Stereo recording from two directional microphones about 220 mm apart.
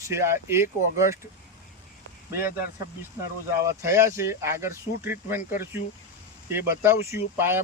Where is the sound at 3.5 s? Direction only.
10° right (ahead or behind).